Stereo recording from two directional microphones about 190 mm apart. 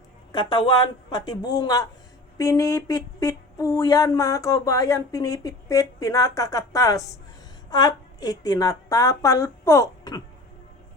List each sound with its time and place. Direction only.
0.3 s a man's voice: 25° left (ahead or behind)